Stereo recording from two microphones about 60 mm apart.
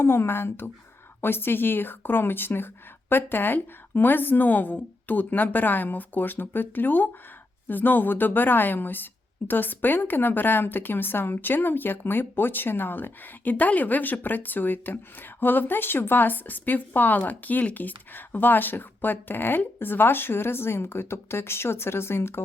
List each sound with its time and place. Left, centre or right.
0.0 s speech: left